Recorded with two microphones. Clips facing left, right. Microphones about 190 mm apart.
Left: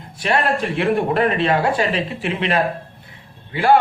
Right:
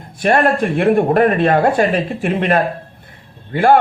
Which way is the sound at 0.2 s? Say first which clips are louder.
Right 5 dB; 50° right (ahead or behind).